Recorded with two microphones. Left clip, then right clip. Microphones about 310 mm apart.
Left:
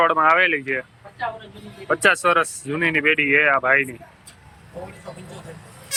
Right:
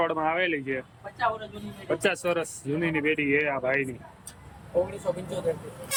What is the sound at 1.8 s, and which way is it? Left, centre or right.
Speech, centre.